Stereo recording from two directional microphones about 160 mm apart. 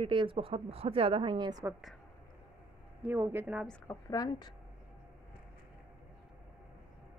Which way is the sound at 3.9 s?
25° left (ahead or behind).